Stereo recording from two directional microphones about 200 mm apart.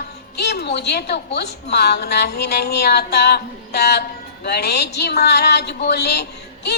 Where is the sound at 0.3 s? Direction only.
55° left (ahead or behind).